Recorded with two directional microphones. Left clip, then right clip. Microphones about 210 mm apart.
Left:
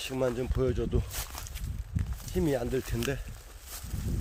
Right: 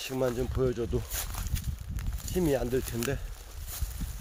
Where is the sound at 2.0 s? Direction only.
20° right (ahead or behind).